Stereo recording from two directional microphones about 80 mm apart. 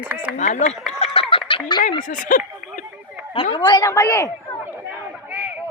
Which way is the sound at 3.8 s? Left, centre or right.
Left.